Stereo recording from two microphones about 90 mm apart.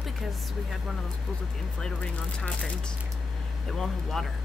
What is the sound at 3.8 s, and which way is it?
Speech, 5° left (ahead or behind).